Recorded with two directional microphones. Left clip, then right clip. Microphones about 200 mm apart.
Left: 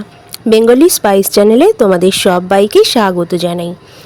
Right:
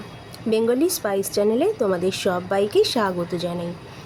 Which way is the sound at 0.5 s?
45° left (ahead or behind).